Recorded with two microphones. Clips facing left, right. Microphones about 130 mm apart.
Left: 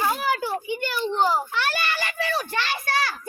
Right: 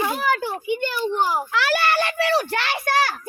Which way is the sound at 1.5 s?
90° right.